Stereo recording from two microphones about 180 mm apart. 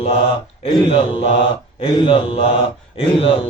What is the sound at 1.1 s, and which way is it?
Mantra, 30° left (ahead or behind).